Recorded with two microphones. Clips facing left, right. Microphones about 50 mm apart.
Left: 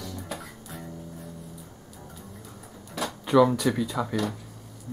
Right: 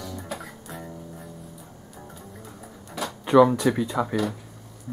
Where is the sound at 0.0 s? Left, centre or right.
Centre.